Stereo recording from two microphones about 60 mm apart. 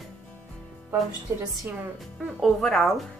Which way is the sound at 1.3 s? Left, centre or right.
Right.